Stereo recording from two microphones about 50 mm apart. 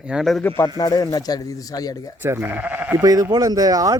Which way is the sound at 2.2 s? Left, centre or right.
Right.